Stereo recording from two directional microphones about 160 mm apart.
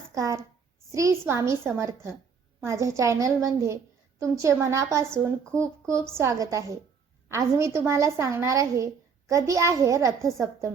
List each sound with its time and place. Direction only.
0.1 s a woman's voice: 20° right (ahead or behind)